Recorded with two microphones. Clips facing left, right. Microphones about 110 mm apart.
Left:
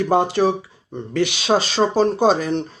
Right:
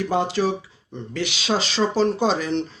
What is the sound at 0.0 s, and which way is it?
Speech, 50° left (ahead or behind).